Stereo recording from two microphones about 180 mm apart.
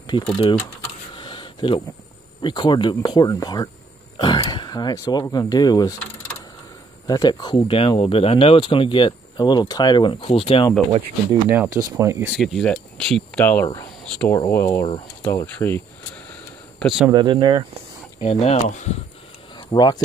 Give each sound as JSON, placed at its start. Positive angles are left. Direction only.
{"t": 0.1, "sound": "speech", "side_deg": 25}
{"t": 1.1, "sound": "a sound", "side_deg": 25}
{"t": 2.4, "sound": "speech", "side_deg": 25}
{"t": 7.1, "sound": "speech", "side_deg": 20}
{"t": 11.4, "sound": "speech", "side_deg": -10}
{"t": 12.4, "sound": "speech", "side_deg": 0}
{"t": 14.3, "sound": "speech", "side_deg": 15}
{"t": 16.8, "sound": "speech", "side_deg": -5}
{"t": 17.1, "sound": "speech", "side_deg": -25}
{"t": 18.2, "sound": "speech", "side_deg": 40}
{"t": 19.5, "sound": "a sound", "side_deg": 25}